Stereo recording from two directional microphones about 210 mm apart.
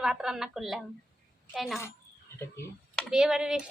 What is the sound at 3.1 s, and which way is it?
Speech, 5° right (ahead or behind).